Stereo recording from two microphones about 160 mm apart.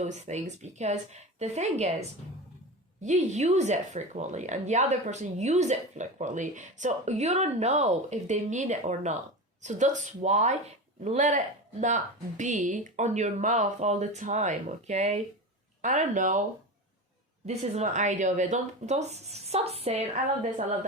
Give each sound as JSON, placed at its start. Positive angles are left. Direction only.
{"t": 0.0, "sound": "speech", "side_deg": -45}
{"t": 17.4, "sound": "speech", "side_deg": -40}